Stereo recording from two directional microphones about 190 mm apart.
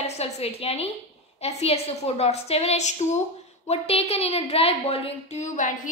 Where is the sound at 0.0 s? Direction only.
35° left (ahead or behind).